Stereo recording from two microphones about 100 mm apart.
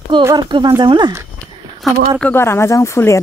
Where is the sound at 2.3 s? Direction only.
25° left (ahead or behind).